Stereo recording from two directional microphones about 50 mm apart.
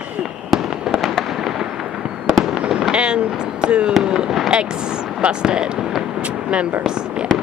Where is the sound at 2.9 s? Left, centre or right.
Centre.